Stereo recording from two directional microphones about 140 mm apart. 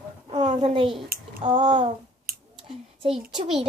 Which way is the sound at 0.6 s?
40° right (ahead or behind).